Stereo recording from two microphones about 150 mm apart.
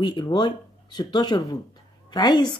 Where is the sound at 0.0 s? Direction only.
30° left (ahead or behind).